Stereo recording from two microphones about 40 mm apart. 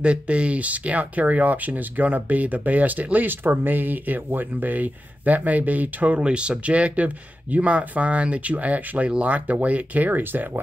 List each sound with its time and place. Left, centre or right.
0.0 s speech: right
6.2 s speech: right